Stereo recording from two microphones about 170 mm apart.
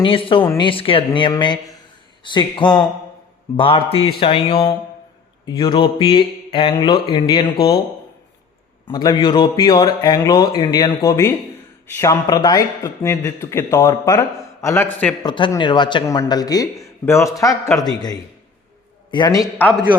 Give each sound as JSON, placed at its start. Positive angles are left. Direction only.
{"t": 0.0, "sound": "speech", "side_deg": 30}
{"t": 8.9, "sound": "a man's voice", "side_deg": 25}
{"t": 15.2, "sound": "speech", "side_deg": 25}